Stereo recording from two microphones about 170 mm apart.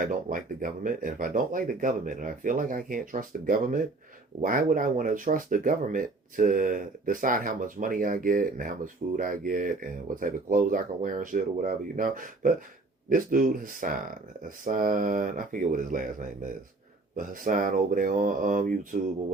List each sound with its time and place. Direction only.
0.0 s speech: 55° right (ahead or behind)